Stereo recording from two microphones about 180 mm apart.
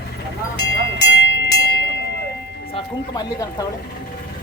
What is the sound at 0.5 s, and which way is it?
Music, 70° left (ahead or behind).